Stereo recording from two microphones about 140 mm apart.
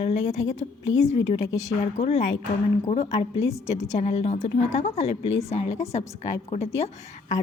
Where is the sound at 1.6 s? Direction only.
50° left (ahead or behind).